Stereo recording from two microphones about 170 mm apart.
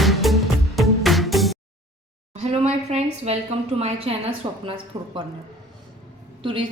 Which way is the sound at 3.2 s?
40° right (ahead or behind).